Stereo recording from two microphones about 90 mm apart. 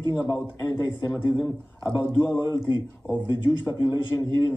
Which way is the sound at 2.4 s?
45° right (ahead or behind).